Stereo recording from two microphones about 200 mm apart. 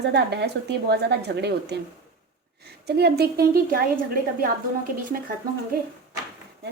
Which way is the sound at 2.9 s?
55° right (ahead or behind).